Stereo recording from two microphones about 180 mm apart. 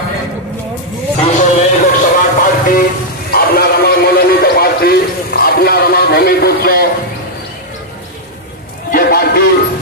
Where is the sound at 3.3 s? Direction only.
60° left (ahead or behind).